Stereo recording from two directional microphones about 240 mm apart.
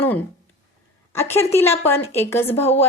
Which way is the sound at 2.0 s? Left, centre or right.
Left.